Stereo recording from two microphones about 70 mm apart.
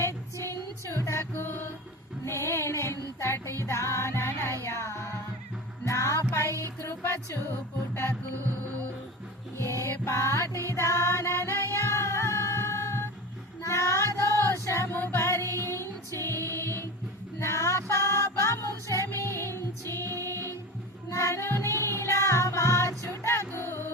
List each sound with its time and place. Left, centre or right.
0.0 s music: left
9.6 s music: left
13.6 s child singing: left
15.1 s music: left